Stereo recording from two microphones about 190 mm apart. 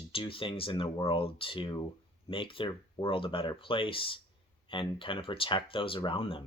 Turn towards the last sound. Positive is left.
turn(degrees=25)  # may be behind; listen again after turning